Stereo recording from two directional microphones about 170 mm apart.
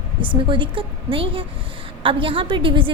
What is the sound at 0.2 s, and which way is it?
A woman's voice, 30° right (ahead or behind).